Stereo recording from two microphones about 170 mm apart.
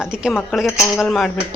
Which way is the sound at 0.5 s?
Centre (ahead or behind).